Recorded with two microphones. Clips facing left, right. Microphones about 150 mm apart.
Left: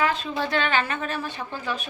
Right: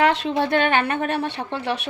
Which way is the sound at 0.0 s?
75° right (ahead or behind).